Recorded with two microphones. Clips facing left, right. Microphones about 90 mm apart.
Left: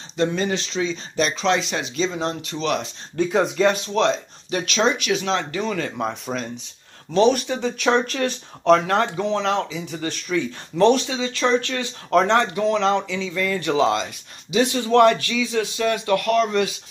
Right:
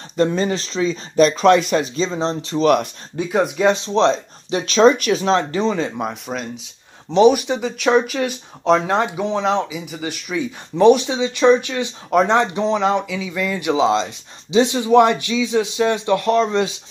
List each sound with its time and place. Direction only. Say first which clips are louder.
0.2 s speech: right 4 dB; 40° right (ahead or behind)
2.0 s speech: right 3 dB; 30° right (ahead or behind)
3.2 s speech: even; 10° right (ahead or behind)
3.6 s speech: right 6 dB; 25° right (ahead or behind)
6.0 s speech: right 1 dB; centre (ahead or behind)
7.1 s speech: right 4 dB; 15° right (ahead or behind)
7.6 s speech: right 2 dB; 5° right (ahead or behind)
8.6 s speech: even; 15° right (ahead or behind)
9.8 s speech: even; 10° right (ahead or behind); by 16.8 s 25° right (ahead or behind)